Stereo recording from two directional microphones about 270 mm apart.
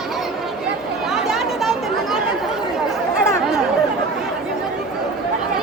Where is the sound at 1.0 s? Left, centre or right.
Centre.